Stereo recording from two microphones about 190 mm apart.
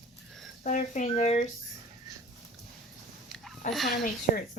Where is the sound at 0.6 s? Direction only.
40° left (ahead or behind).